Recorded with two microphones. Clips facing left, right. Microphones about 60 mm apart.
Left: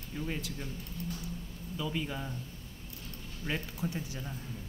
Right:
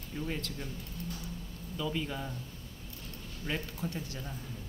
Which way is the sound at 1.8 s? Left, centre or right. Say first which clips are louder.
Right 1 dB; centre.